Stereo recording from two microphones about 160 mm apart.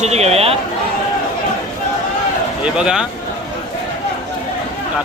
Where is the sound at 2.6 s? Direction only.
5° right (ahead or behind).